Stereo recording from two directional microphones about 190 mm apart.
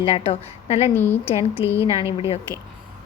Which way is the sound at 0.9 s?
10° left (ahead or behind).